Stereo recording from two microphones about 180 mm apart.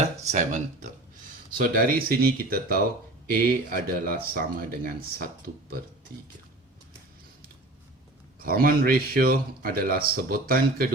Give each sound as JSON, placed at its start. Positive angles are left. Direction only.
{"t": 0.0, "sound": "speech", "side_deg": -40}
{"t": 1.5, "sound": "a man's voice", "side_deg": -55}
{"t": 8.4, "sound": "a man's voice", "side_deg": -55}